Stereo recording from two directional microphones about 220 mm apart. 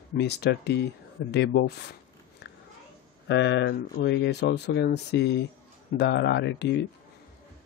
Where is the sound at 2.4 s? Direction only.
50° left (ahead or behind).